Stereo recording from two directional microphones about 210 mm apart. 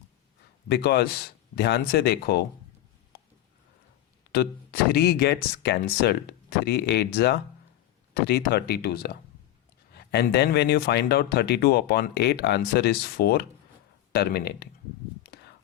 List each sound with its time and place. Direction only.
0.7 s speech: 50° left (ahead or behind)
4.3 s speech: 50° left (ahead or behind)
15.3 s a sound: 50° left (ahead or behind)